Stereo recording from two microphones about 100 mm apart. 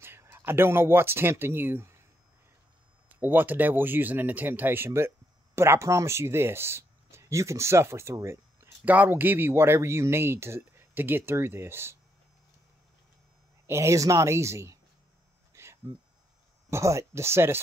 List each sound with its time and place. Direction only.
0.0 s speech: 25° right (ahead or behind)
3.2 s speech: 20° right (ahead or behind)
8.8 s speech: 15° right (ahead or behind)
13.7 s speech: 30° right (ahead or behind)
15.5 s a sound: 30° right (ahead or behind)
16.7 s speech: 30° right (ahead or behind)